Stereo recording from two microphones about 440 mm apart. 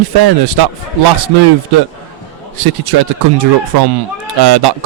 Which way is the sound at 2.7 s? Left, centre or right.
Right.